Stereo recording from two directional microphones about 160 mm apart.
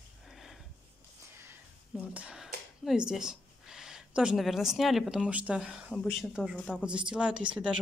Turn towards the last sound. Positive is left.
turn(degrees=-5)  # may be behind; listen again after turning